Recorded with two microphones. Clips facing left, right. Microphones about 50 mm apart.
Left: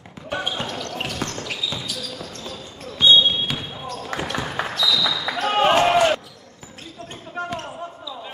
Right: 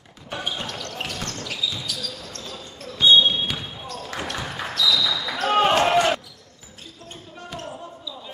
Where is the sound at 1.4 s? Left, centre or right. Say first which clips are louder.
Left 1 dB; centre.